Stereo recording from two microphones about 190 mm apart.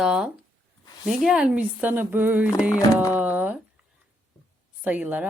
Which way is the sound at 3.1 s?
10° right (ahead or behind).